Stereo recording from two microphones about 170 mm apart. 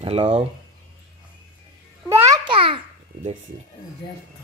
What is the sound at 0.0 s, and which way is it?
Speech, 35° right (ahead or behind).